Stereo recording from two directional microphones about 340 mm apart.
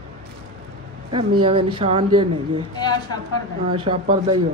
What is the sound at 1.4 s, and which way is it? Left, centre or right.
Speech, centre.